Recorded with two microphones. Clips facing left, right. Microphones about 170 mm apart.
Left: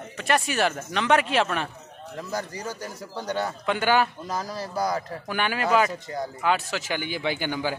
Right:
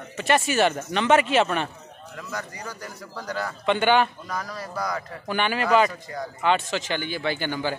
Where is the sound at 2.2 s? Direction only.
30° left (ahead or behind).